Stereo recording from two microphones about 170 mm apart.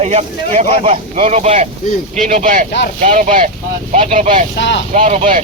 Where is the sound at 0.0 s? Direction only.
40° right (ahead or behind).